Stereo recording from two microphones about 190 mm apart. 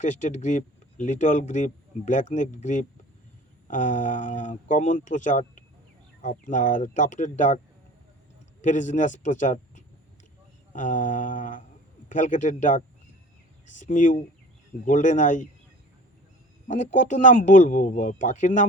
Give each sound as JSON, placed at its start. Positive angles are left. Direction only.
{"t": 0.0, "sound": "speech", "side_deg": 40}
{"t": 8.6, "sound": "speech", "side_deg": 40}
{"t": 10.7, "sound": "a sound", "side_deg": 45}
{"t": 12.0, "sound": "speech", "side_deg": 40}
{"t": 16.6, "sound": "speech", "side_deg": 40}